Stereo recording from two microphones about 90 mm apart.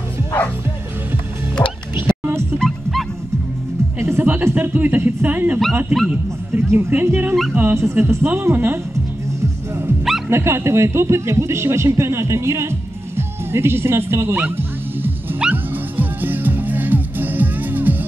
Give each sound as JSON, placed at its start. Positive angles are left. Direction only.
{"t": 1.6, "sound": "music", "side_deg": 20}
{"t": 2.0, "sound": "music", "side_deg": -25}
{"t": 2.6, "sound": "music", "side_deg": 0}
{"t": 4.0, "sound": "a sound", "side_deg": -25}
{"t": 6.7, "sound": "a woman's voice", "side_deg": -25}
{"t": 10.0, "sound": "dog", "side_deg": -5}
{"t": 10.3, "sound": "speech", "side_deg": -30}
{"t": 15.5, "sound": "music", "side_deg": -20}